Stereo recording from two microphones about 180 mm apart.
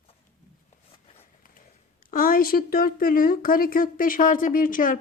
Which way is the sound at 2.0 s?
50° left (ahead or behind).